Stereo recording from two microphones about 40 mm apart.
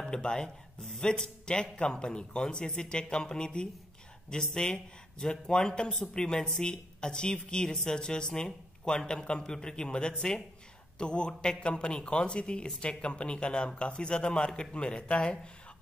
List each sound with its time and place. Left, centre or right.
0.1 s speech: centre